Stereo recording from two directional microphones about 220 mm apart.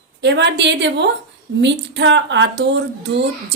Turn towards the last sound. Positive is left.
turn(degrees=-55)  # may be behind; listen again after turning